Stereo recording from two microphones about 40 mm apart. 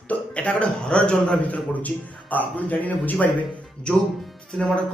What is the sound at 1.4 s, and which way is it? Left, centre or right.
A man's voice, left.